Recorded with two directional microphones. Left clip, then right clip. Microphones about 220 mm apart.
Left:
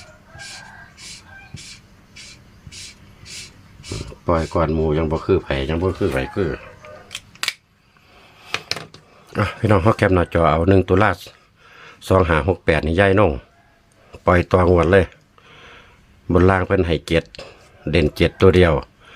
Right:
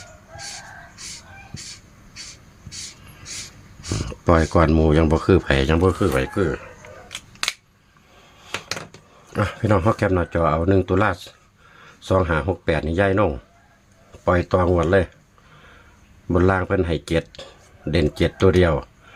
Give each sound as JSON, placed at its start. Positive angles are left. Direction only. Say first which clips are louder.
{"t": 3.9, "sound": "speech", "louder": "right 2 dB", "side_deg": -40}
{"t": 6.0, "sound": "speech", "louder": "even", "side_deg": -10}
{"t": 9.3, "sound": "speech", "louder": "left 2 dB", "side_deg": 10}
{"t": 16.3, "sound": "speech", "louder": "left 3 dB", "side_deg": 15}